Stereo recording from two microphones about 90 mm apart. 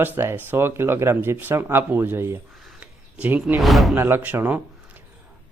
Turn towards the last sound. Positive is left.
turn(degrees=-20)  # may be behind; listen again after turning